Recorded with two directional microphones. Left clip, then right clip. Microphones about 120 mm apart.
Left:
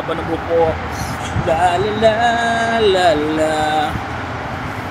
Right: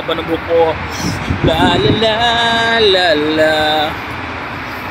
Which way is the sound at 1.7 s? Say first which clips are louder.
Right 2 dB; centre (ahead or behind).